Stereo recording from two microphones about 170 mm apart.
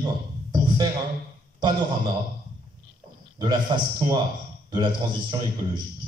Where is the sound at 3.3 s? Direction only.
25° right (ahead or behind).